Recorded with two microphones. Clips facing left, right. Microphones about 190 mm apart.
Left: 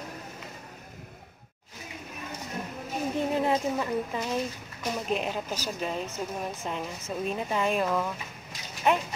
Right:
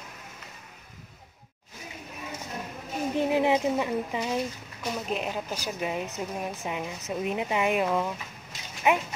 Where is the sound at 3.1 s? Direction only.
15° right (ahead or behind).